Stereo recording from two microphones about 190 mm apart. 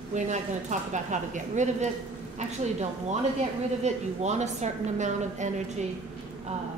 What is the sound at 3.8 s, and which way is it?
A woman's voice, 35° right (ahead or behind).